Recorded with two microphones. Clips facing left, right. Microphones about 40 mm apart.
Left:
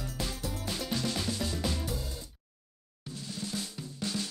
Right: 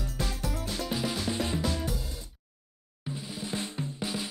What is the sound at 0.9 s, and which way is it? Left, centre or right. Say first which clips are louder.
Music: right 1 dB; centre.